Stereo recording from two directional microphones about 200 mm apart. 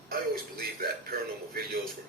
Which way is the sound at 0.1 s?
45° right (ahead or behind).